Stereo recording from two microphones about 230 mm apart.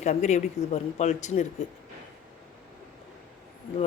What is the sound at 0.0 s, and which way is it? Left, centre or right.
Speech, left.